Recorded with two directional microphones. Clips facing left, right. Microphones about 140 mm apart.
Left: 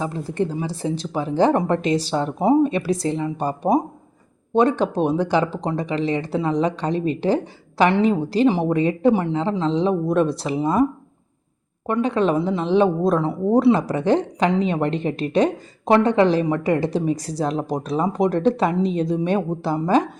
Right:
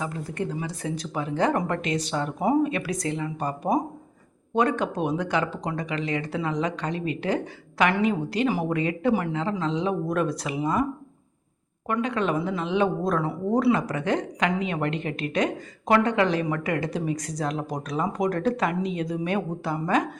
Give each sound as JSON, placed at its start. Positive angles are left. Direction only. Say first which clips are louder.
{"t": 0.0, "sound": "a woman's voice", "louder": "left 6 dB", "side_deg": 30}
{"t": 11.9, "sound": "a woman's voice", "louder": "left 6 dB", "side_deg": 30}